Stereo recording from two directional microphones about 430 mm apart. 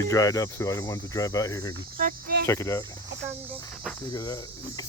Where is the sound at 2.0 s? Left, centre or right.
Centre.